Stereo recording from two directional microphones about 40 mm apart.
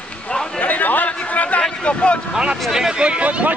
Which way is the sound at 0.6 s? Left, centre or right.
Left.